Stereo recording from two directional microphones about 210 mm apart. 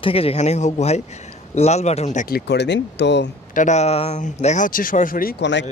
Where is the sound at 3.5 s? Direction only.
35° left (ahead or behind); by 5.6 s 55° left (ahead or behind).